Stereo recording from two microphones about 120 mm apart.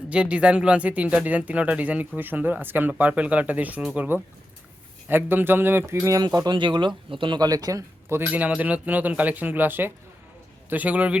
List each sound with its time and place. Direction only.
0.1 s speech: 10° right (ahead or behind)